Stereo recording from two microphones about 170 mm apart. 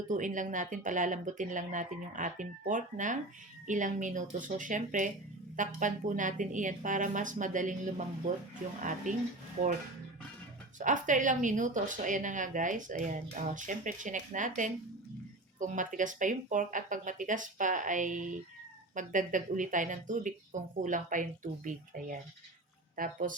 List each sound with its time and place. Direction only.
0.1 s speech: 50° right (ahead or behind)
10.8 s speech: 50° right (ahead or behind)